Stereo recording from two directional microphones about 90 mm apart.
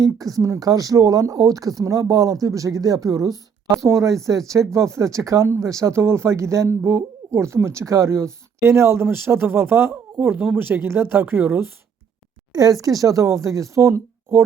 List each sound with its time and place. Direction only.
0.0 s speech: 40° right (ahead or behind); by 11.6 s 25° right (ahead or behind)
12.5 s speech: 40° right (ahead or behind)